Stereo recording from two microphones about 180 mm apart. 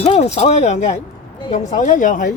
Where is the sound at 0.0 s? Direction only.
40° left (ahead or behind).